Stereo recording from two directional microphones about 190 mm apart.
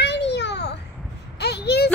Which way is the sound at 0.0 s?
65° left (ahead or behind).